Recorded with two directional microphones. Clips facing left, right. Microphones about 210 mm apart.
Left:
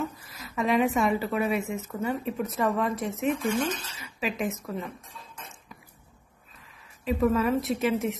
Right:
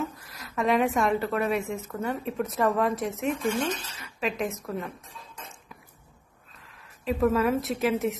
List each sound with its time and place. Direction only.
0.0 s a woman's voice: centre (ahead or behind)
6.6 s speech: centre (ahead or behind)